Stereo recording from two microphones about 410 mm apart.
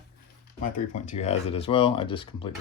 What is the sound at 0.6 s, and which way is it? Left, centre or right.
Speech, centre.